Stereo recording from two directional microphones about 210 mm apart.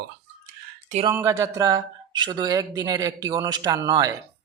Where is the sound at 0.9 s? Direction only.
25° right (ahead or behind).